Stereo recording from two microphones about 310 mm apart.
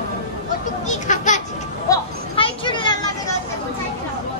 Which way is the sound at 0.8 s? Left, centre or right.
Left.